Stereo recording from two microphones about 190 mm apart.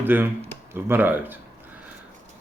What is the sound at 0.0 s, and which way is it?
Speech, 10° right (ahead or behind).